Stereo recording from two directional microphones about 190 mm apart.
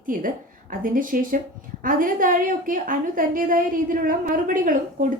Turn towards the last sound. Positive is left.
turn(degrees=-45)  # may be behind; listen again after turning